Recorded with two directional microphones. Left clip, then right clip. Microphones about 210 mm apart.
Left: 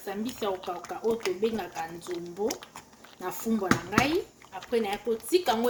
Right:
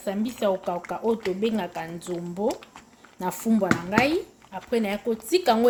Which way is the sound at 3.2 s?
55° right (ahead or behind).